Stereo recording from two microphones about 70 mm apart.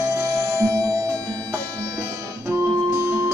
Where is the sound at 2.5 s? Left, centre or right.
Right.